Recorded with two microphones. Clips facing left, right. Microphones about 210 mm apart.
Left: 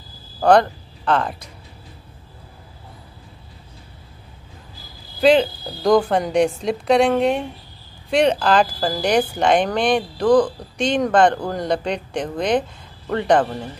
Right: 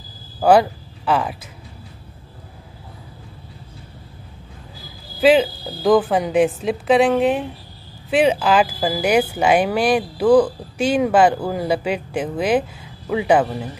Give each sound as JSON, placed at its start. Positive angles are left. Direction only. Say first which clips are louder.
{"t": 0.4, "sound": "speech", "louder": "right 1 dB", "side_deg": -5}
{"t": 5.2, "sound": "a woman's voice", "louder": "right 1 dB", "side_deg": -5}